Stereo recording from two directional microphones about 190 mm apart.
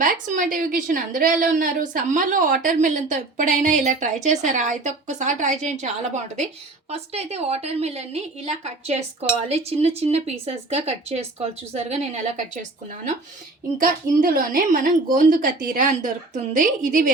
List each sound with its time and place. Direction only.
0.0 s a woman's voice: 45° right (ahead or behind)
13.7 s a woman's voice: 50° right (ahead or behind)